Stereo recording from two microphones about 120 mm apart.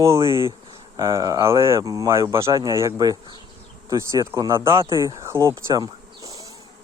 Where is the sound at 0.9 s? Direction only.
30° right (ahead or behind).